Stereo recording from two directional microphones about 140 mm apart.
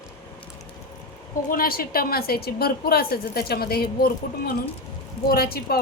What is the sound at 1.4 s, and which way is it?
A woman's voice, 90° left.